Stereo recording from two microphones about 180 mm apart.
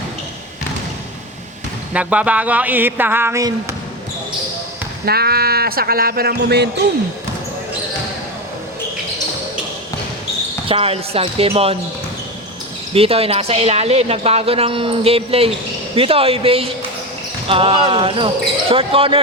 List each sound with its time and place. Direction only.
1.9 s speech: 5° right (ahead or behind)
5.0 s speech: 60° right (ahead or behind)
10.7 s a woman's voice: 30° right (ahead or behind)
12.9 s a woman's voice: 30° right (ahead or behind)